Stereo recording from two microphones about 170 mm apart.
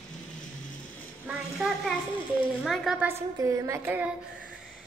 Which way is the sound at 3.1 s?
15° right (ahead or behind).